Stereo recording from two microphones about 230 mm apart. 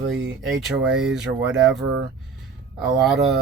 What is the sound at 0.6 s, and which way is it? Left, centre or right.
Speech, centre.